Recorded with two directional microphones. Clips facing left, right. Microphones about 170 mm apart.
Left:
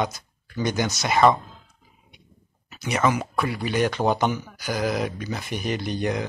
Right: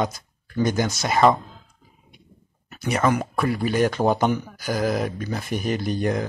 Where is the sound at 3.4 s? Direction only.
50° right (ahead or behind).